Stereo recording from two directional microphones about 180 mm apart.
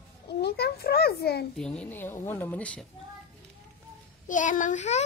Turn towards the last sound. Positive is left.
turn(degrees=40)  # may be behind; listen again after turning